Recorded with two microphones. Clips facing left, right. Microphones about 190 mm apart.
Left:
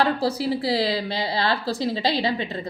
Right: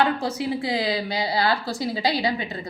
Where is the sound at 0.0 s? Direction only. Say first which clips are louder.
Left 1 dB; 35° left (ahead or behind).